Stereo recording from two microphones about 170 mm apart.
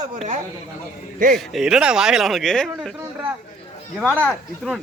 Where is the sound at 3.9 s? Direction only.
5° right (ahead or behind).